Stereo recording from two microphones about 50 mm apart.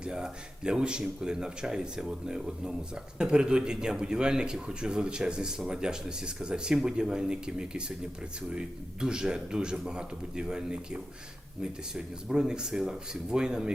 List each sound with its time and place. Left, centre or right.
0.0 s speech: centre